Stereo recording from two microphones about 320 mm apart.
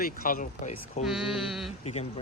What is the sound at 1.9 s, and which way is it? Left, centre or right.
Speech, centre.